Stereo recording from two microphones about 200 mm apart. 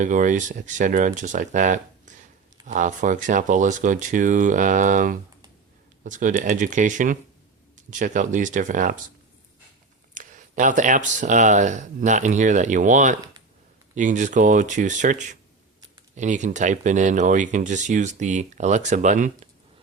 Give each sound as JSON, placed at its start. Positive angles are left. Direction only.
{"t": 0.0, "sound": "speech", "side_deg": -40}
{"t": 10.2, "sound": "speech", "side_deg": -40}